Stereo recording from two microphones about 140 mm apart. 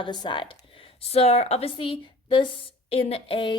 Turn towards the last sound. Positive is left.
turn(degrees=40)  # may be behind; listen again after turning